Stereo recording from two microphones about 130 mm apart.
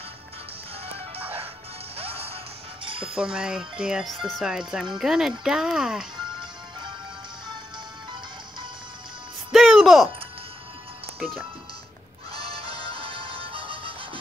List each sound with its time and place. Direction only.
0.8 s music: 50° right (ahead or behind)
3.2 s speech: 5° right (ahead or behind)
9.5 s music: centre (ahead or behind)
12.4 s music: 45° right (ahead or behind)